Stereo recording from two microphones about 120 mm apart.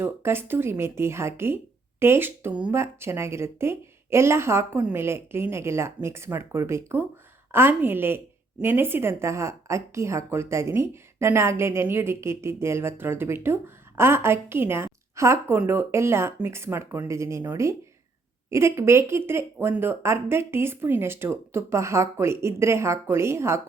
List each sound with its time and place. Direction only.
0.0 s a woman's voice: 20° right (ahead or behind)